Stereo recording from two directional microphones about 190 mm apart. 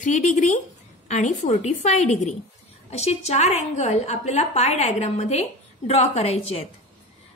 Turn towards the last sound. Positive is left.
turn(degrees=35)  # may be behind; listen again after turning